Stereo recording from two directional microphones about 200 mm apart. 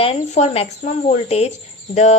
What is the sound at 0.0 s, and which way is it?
Speech, 30° left (ahead or behind).